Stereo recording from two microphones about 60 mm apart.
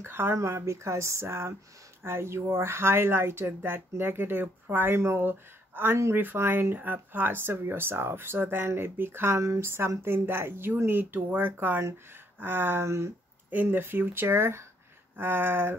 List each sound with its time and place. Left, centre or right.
0.0 s speech: right
13.7 s speech: right